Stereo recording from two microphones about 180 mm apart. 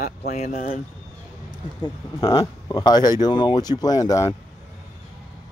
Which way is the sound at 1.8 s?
20° left (ahead or behind).